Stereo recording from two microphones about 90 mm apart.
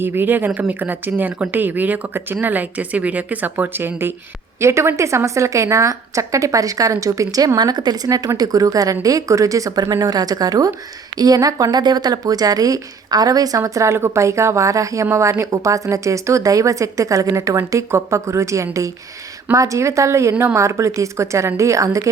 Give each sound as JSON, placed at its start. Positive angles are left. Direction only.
{"t": 0.0, "sound": "a woman's voice", "side_deg": -25}